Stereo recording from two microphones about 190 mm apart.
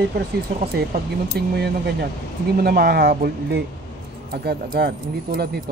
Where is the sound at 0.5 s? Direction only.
55° right (ahead or behind).